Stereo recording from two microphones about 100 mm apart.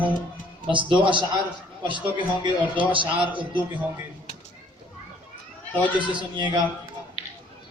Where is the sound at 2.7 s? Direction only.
55° right (ahead or behind).